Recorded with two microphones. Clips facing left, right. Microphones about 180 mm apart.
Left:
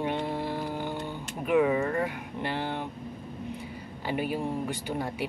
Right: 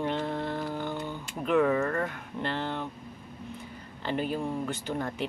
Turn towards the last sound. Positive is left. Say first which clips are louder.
# even
turn(degrees=10)  # may be behind; listen again after turning